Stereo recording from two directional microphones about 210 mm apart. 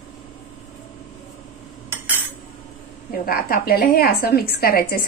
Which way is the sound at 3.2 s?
45° left (ahead or behind).